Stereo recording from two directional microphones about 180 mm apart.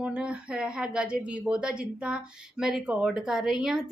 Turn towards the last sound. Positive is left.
turn(degrees=0)  # may be behind; listen again after turning